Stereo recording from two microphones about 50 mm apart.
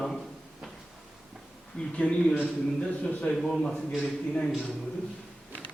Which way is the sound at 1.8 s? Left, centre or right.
Left.